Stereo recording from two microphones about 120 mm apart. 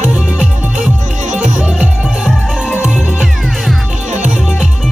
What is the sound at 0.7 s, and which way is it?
Music, 90° right.